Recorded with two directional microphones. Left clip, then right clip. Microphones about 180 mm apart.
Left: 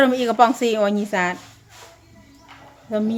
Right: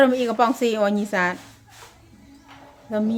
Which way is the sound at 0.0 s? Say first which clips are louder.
Left 2 dB; 10° left (ahead or behind).